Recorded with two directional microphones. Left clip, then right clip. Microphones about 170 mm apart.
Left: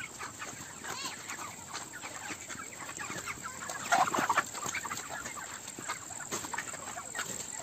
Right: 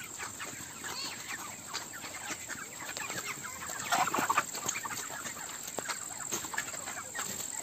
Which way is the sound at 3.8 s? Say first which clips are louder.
Left 3 dB; 35° left (ahead or behind).